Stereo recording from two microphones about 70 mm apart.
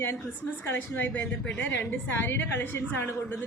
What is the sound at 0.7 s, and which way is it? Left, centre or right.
A woman's voice, left.